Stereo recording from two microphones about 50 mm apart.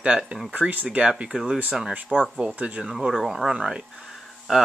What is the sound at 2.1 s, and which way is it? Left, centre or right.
Speech, centre.